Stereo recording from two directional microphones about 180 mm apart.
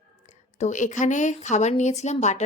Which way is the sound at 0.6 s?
40° left (ahead or behind).